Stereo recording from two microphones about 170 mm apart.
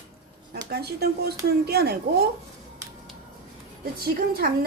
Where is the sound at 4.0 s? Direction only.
60° right (ahead or behind).